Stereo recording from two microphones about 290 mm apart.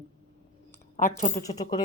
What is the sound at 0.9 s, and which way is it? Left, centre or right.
Speech, left.